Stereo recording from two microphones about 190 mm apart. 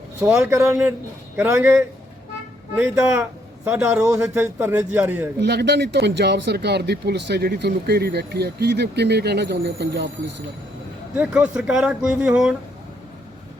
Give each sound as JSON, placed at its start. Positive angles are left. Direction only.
{"t": 0.2, "sound": "a man's voice", "side_deg": -10}
{"t": 2.7, "sound": "a man's voice", "side_deg": -15}
{"t": 5.4, "sound": "speech", "side_deg": -60}
{"t": 11.1, "sound": "speech", "side_deg": -5}